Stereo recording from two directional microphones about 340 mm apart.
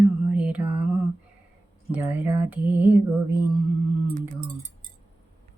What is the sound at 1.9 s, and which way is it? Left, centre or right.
Speech, centre.